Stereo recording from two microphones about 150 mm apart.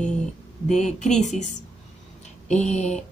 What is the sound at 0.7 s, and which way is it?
Speech, 50° left (ahead or behind).